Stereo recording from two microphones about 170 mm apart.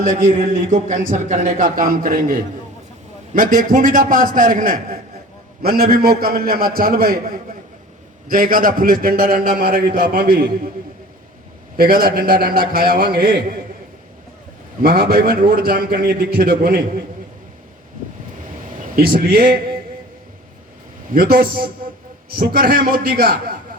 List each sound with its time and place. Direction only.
0.0 s a man's voice: 50° right (ahead or behind)
11.8 s a man's voice: 60° right (ahead or behind)
14.8 s a man's voice: 60° right (ahead or behind)
18.8 s a man's voice: 55° right (ahead or behind)
21.1 s a man's voice: 60° right (ahead or behind)